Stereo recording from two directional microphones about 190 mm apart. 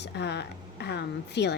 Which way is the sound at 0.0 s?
60° left (ahead or behind).